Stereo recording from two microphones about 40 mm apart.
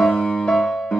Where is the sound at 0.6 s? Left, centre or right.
Centre.